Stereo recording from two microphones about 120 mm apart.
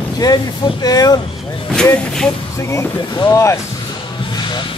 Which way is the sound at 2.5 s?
25° left (ahead or behind).